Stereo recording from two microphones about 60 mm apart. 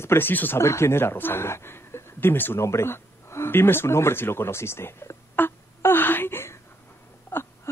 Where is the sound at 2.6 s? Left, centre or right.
Left.